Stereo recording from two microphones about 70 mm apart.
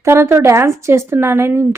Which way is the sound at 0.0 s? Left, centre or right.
Right.